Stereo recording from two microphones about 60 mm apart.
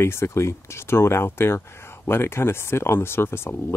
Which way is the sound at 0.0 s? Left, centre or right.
Left.